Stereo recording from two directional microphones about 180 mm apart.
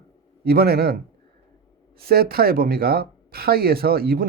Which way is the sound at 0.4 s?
60° right (ahead or behind).